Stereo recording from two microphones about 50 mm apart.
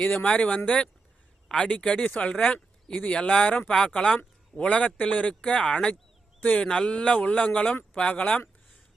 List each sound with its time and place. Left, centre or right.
0.0 s speech: left
6.4 s speech: left
6.7 s speech: centre